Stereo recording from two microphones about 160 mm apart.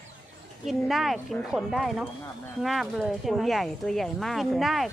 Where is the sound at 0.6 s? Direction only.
Centre (ahead or behind).